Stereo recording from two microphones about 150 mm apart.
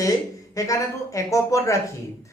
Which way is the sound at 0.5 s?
20° left (ahead or behind).